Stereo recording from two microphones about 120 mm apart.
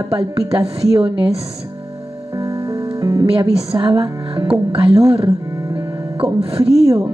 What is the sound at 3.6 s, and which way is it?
Speech, 40° right (ahead or behind).